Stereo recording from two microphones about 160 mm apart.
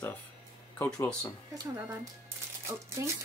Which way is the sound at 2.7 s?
15° right (ahead or behind).